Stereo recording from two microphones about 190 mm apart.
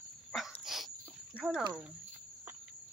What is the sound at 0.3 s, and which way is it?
Dog, centre (ahead or behind).